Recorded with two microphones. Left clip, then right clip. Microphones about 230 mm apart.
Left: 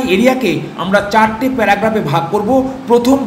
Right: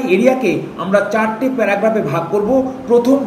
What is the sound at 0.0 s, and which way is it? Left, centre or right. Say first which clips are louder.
Speech: left 1 dB; centre.